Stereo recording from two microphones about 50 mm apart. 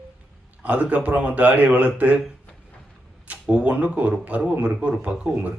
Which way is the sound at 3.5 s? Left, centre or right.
Right.